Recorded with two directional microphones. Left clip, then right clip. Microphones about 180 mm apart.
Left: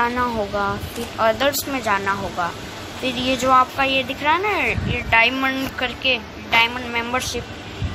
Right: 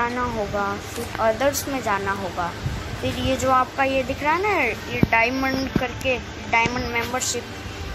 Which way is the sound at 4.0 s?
Centre (ahead or behind).